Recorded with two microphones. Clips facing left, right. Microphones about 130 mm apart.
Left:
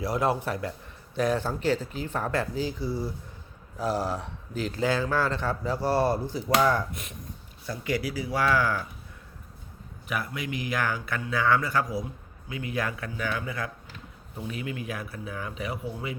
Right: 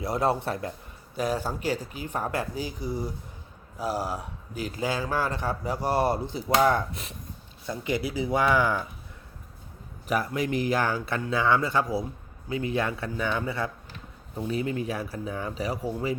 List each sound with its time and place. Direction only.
0.0 s speech: 25° right (ahead or behind)
1.1 s speech: 5° right (ahead or behind)
10.1 s speech: 40° right (ahead or behind)